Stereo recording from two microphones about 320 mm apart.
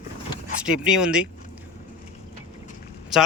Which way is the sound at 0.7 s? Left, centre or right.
Centre.